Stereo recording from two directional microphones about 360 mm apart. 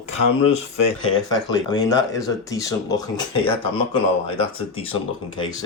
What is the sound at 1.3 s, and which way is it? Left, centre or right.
Speech, centre.